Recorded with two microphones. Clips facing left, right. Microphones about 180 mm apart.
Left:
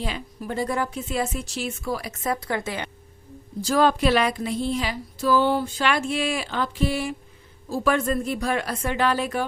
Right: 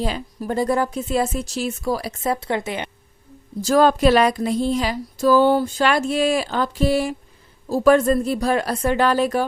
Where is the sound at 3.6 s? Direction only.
45° right (ahead or behind).